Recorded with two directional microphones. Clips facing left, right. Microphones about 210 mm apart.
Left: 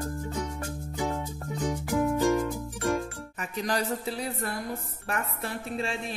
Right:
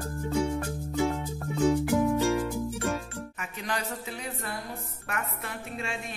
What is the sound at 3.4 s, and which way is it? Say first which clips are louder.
A woman's voice: left 6 dB; 35° left (ahead or behind).